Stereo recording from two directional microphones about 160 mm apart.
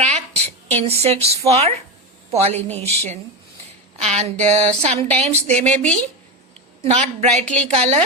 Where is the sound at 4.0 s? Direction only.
40° right (ahead or behind).